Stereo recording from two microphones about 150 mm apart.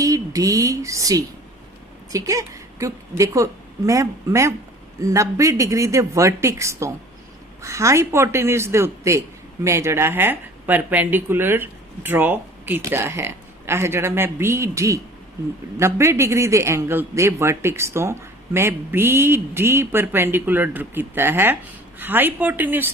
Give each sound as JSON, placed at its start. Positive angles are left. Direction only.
{"t": 0.0, "sound": "a woman's voice", "side_deg": -25}